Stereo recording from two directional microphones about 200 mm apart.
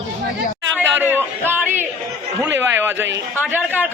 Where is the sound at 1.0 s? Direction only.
10° right (ahead or behind).